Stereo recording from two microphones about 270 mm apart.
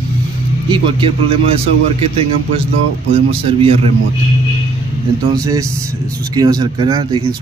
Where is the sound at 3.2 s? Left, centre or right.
Right.